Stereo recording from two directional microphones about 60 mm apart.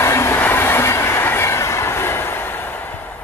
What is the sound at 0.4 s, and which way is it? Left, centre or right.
Train, left.